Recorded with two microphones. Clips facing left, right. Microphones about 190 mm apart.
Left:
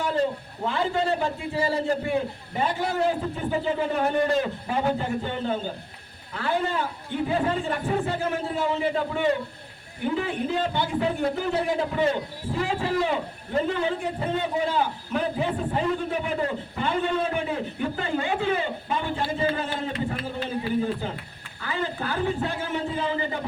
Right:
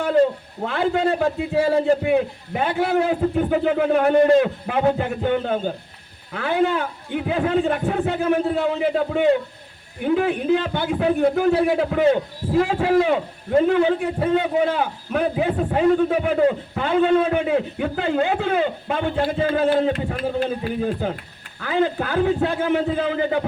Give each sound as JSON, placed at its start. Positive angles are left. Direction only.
{"t": 0.7, "sound": "a man's voice", "side_deg": -65}